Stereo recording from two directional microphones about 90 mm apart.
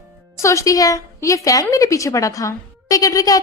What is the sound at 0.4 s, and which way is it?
A woman's voice, 35° left (ahead or behind).